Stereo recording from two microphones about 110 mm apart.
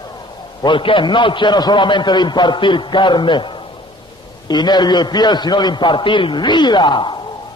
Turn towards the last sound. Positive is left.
turn(degrees=45)  # may be behind; listen again after turning